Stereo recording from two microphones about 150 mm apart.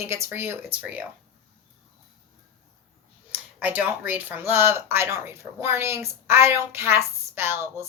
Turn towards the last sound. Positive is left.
turn(degrees=-20)  # may be behind; listen again after turning